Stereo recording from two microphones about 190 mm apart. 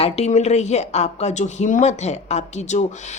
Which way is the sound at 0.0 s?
35° left (ahead or behind).